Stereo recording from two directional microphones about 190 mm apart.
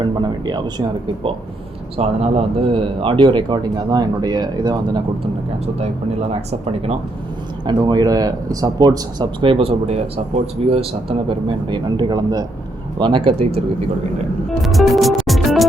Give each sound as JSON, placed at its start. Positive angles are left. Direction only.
{"t": 0.0, "sound": "speech", "side_deg": -20}
{"t": 6.5, "sound": "speech", "side_deg": -30}
{"t": 14.6, "sound": "music", "side_deg": 0}